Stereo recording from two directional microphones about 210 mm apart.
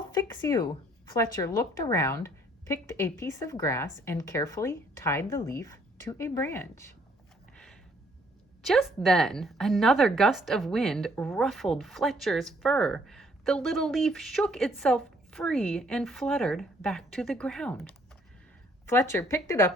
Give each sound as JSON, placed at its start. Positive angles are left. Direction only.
{"t": 0.1, "sound": "a woman's voice", "side_deg": 15}
{"t": 7.5, "sound": "a sound", "side_deg": 5}
{"t": 8.6, "sound": "a woman's voice", "side_deg": 0}